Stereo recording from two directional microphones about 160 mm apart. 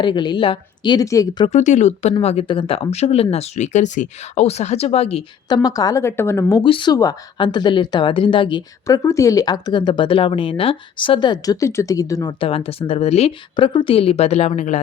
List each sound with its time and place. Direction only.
0.0 s speech: 30° left (ahead or behind)
1.5 s speech: 45° left (ahead or behind)
5.6 s speech: 25° left (ahead or behind)
6.7 s speech: 30° left (ahead or behind)
9.0 s speech: 20° left (ahead or behind)
12.4 s speech: 35° left (ahead or behind)